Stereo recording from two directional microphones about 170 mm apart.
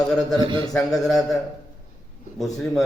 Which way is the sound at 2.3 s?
Centre (ahead or behind).